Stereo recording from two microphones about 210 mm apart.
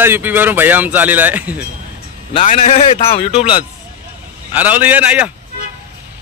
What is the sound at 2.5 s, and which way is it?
A man's voice, 30° left (ahead or behind).